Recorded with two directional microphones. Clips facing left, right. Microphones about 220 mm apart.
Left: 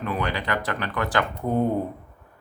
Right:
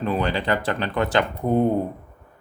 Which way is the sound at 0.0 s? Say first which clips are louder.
Right 4 dB; 30° right (ahead or behind).